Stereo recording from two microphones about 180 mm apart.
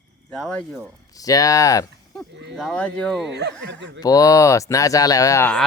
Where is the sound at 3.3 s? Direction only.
70° right (ahead or behind).